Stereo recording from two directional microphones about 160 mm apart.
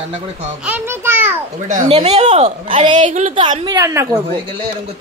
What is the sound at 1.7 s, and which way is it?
Speech, 45° right (ahead or behind).